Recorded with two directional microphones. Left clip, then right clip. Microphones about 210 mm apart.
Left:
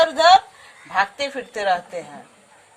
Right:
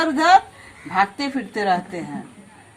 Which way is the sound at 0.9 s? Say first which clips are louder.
Right 1 dB; 40° left (ahead or behind).